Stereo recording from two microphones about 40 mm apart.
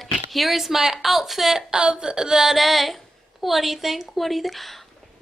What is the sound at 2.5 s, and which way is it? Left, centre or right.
A woman's voice, centre.